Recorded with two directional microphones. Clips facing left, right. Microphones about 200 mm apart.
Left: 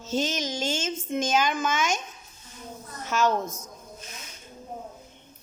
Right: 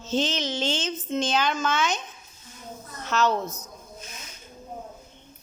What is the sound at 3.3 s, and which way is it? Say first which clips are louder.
Speech: even; 45° left (ahead or behind).